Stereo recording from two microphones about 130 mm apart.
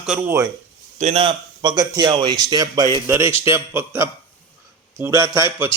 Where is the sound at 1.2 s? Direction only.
35° right (ahead or behind).